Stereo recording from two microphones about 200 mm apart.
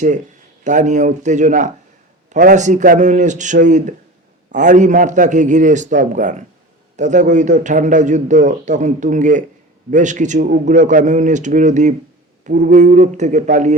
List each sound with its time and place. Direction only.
0.6 s a man's voice: 40° right (ahead or behind)